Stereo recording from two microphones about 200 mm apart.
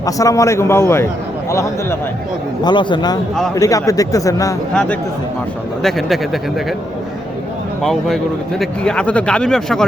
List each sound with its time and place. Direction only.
0.0 s speech: 15° left (ahead or behind)
4.7 s speech: 5° left (ahead or behind)
7.8 s speech: centre (ahead or behind)